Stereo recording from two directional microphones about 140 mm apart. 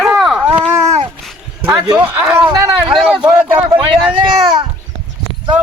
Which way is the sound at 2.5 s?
25° right (ahead or behind).